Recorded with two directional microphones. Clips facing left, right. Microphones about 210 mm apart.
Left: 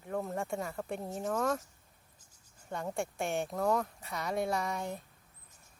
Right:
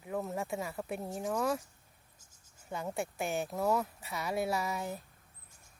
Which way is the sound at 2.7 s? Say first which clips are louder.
Left 1 dB; centre (ahead or behind).